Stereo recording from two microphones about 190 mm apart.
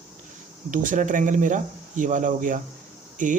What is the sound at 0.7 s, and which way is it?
A man's voice, 45° right (ahead or behind).